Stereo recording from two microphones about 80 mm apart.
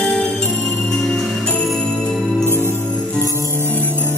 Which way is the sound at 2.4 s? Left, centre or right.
Left.